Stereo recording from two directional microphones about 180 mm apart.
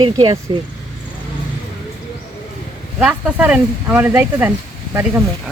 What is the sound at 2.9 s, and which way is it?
Speech, 5° right (ahead or behind).